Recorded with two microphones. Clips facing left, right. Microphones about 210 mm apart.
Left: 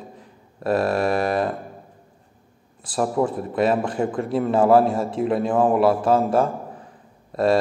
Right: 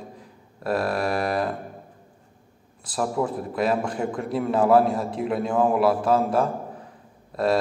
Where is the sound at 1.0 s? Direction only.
Centre (ahead or behind).